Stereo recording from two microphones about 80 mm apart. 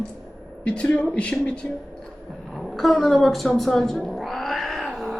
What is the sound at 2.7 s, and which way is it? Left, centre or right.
Cat, centre.